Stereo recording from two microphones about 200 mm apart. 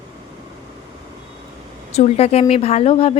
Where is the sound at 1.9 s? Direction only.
30° left (ahead or behind).